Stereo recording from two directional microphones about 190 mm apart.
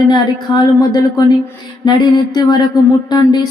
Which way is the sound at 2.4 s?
20° left (ahead or behind).